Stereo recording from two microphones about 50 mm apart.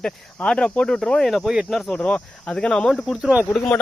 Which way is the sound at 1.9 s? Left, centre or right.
Left.